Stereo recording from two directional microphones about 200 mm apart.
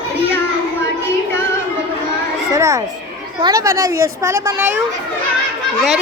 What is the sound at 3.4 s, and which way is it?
A woman's voice, 20° right (ahead or behind).